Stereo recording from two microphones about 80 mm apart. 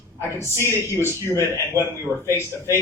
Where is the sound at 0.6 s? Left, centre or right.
Right.